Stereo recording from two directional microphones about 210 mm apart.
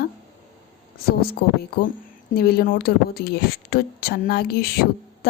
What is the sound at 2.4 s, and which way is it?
A woman's voice, 50° left (ahead or behind).